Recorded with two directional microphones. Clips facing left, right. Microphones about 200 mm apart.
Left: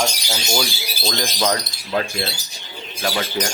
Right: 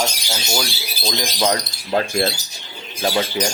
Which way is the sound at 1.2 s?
15° right (ahead or behind).